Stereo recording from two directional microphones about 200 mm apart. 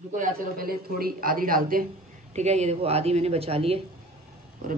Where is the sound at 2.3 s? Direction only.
35° right (ahead or behind).